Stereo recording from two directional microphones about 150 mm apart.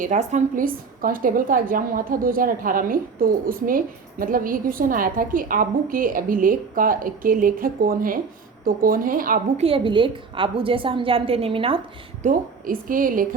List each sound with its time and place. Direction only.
0.0 s a woman's voice: 50° right (ahead or behind); by 9.4 s 70° right (ahead or behind)
9.6 s a woman's voice: 40° right (ahead or behind)
12.2 s a woman's voice: 65° right (ahead or behind)